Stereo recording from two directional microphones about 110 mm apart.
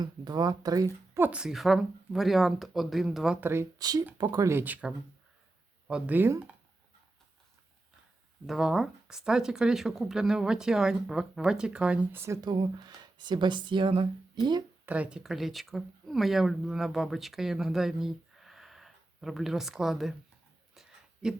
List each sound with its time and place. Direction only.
0.0 s speech: 35° right (ahead or behind)
1.2 s speech: 10° right (ahead or behind)
3.4 s speech: 25° right (ahead or behind)
3.8 s speech: 35° right (ahead or behind); by 6.3 s 15° right (ahead or behind)
8.4 s speech: 5° right (ahead or behind)
12.4 s speech: 40° right (ahead or behind)
14.8 s speech: 15° right (ahead or behind)
15.2 s speech: centre (ahead or behind)
20.7 s a sound: 5° right (ahead or behind)